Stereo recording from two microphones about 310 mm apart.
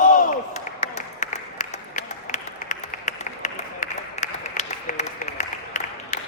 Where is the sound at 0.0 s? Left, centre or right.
Left.